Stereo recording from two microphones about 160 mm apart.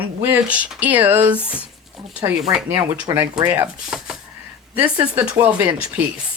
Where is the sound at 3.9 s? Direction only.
5° right (ahead or behind).